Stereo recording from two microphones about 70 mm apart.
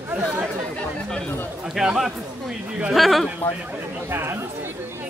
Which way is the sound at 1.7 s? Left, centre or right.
Centre.